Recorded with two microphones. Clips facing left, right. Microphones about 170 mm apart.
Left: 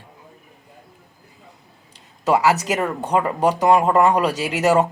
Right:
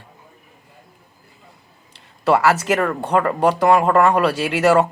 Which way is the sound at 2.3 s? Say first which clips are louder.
Right 1 dB; 15° left (ahead or behind).